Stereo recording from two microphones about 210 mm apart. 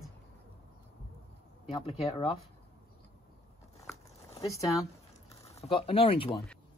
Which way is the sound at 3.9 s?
30° left (ahead or behind).